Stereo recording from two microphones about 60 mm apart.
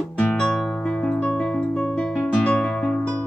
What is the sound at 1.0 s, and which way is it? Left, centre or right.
Music, left.